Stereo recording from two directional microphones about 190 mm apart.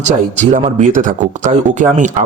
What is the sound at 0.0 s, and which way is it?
Speech, 40° right (ahead or behind).